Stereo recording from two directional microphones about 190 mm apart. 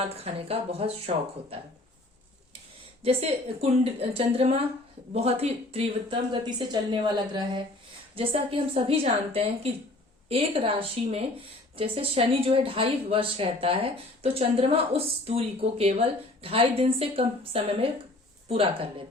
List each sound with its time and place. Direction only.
0.0 s a woman's voice: 30° right (ahead or behind)
3.0 s a woman's voice: 30° right (ahead or behind)